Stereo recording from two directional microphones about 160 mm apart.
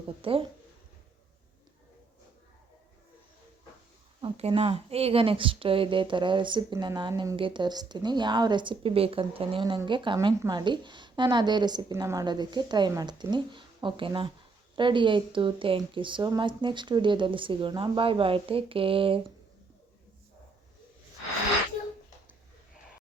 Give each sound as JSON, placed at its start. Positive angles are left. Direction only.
{"t": 0.2, "sound": "speech", "side_deg": -35}
{"t": 4.2, "sound": "a woman's voice", "side_deg": -40}